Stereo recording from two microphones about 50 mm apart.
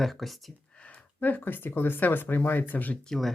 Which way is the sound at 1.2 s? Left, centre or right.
Left.